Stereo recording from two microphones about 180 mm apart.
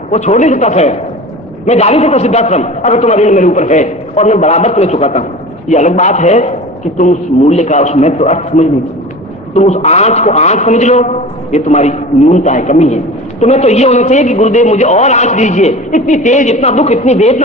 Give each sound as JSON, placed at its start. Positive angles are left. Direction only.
{"t": 0.1, "sound": "a man's voice", "side_deg": 40}